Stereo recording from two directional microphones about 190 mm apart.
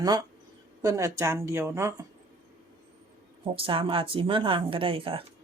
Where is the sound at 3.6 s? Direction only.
30° right (ahead or behind).